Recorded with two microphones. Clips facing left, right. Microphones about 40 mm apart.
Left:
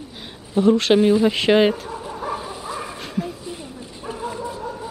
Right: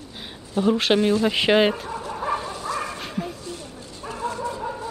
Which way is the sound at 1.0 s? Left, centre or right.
Centre.